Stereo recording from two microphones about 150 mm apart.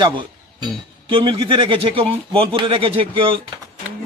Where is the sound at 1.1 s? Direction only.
35° right (ahead or behind).